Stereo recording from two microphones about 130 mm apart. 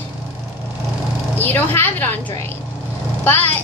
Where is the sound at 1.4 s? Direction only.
15° left (ahead or behind).